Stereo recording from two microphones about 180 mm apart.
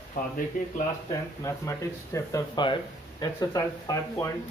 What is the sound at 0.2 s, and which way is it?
Speech, 50° left (ahead or behind).